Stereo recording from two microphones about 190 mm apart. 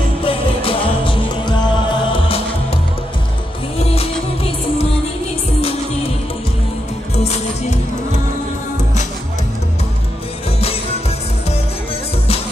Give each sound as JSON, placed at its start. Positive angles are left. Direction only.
{"t": 0.2, "sound": "music", "side_deg": 30}
{"t": 7.2, "sound": "music", "side_deg": 35}